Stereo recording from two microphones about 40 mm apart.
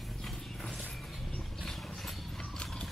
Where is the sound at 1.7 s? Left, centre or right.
Centre.